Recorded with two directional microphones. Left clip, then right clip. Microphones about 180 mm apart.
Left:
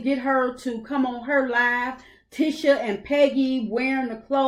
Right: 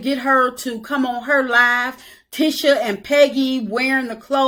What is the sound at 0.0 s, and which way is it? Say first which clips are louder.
Speech: right 6 dB; 20° right (ahead or behind).